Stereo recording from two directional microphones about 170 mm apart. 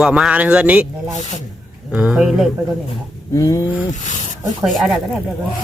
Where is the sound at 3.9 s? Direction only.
45° left (ahead or behind).